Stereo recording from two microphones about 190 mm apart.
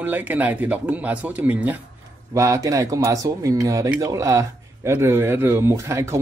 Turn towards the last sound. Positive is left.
turn(degrees=-15)  # may be behind; listen again after turning